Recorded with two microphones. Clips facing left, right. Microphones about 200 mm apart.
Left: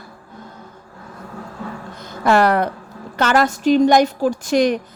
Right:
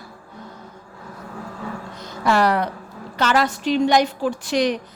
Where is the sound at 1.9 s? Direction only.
50° left (ahead or behind).